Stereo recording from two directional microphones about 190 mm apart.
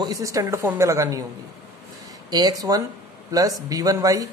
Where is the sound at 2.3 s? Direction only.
20° right (ahead or behind).